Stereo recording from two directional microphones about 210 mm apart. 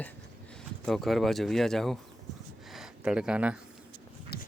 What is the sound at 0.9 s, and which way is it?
Speech, centre (ahead or behind).